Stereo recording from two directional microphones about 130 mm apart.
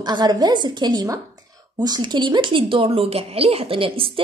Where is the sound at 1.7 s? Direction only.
30° right (ahead or behind).